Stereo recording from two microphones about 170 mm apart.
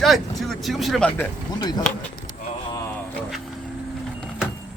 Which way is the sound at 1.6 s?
25° left (ahead or behind).